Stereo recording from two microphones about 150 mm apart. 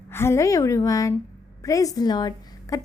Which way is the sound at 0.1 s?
15° left (ahead or behind).